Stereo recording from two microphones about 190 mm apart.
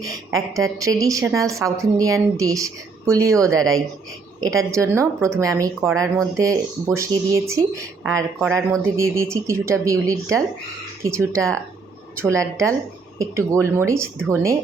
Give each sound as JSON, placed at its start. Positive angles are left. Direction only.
{"t": 0.6, "sound": "speech", "side_deg": -15}
{"t": 4.4, "sound": "speech", "side_deg": -15}